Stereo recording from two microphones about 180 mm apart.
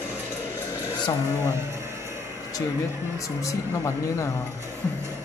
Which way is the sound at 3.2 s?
15° left (ahead or behind).